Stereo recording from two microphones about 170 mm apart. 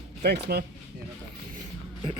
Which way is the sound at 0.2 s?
70° right (ahead or behind).